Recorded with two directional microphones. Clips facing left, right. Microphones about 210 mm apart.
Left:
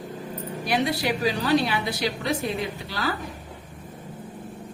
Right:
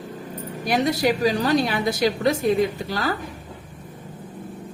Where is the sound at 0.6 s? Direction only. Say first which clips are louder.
Right 4 dB; 45° right (ahead or behind).